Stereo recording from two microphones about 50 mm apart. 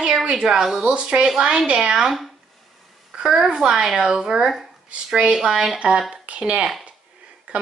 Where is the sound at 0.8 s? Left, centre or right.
Right.